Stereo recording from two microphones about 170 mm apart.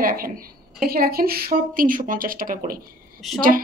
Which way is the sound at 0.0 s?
55° right (ahead or behind).